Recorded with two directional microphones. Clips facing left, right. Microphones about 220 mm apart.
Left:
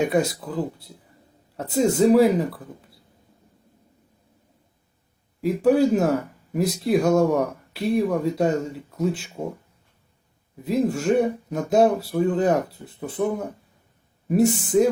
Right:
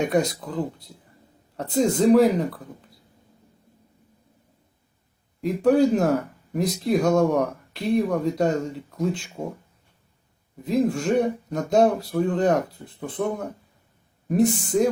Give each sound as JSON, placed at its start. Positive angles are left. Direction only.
{"t": 0.0, "sound": "speech", "side_deg": 5}
{"t": 5.4, "sound": "speech", "side_deg": 5}
{"t": 10.6, "sound": "speech", "side_deg": 5}
{"t": 14.3, "sound": "speech", "side_deg": 5}